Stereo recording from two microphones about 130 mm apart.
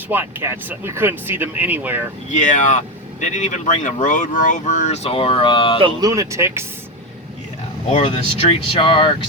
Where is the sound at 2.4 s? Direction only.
85° left.